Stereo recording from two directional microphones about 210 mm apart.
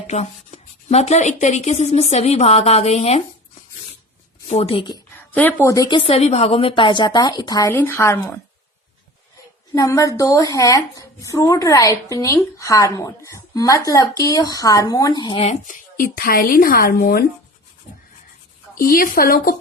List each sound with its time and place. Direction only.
0.1 s speech: 30° left (ahead or behind)
4.4 s a woman's voice: 30° left (ahead or behind)
5.1 s a woman's voice: 10° left (ahead or behind)
6.0 s a woman's voice: 30° left (ahead or behind)
9.7 s speech: 15° left (ahead or behind); by 17.2 s 45° left (ahead or behind)
18.7 s speech: 45° left (ahead or behind)